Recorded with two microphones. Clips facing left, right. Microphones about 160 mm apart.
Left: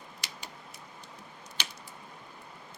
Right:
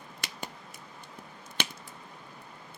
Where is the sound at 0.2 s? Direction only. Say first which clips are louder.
Right 5 dB; 55° right (ahead or behind).